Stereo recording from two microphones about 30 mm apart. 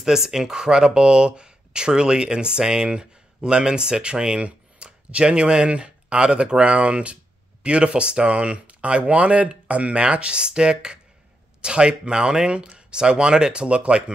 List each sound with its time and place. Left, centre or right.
0.0 s speech: centre; by 4.5 s right
4.8 s a sound: right
5.1 s speech: right
10.0 s speech: right